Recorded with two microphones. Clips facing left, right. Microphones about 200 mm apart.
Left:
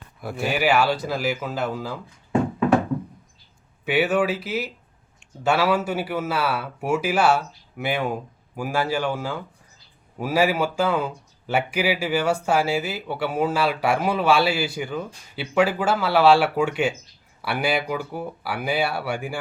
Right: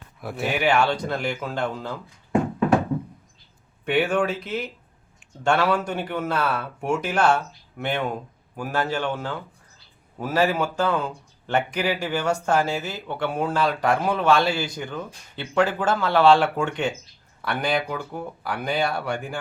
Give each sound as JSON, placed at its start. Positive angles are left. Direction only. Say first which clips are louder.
{"t": 0.2, "sound": "speech", "louder": "left 1 dB", "side_deg": 0}
{"t": 3.8, "sound": "speech", "louder": "left 1 dB", "side_deg": 5}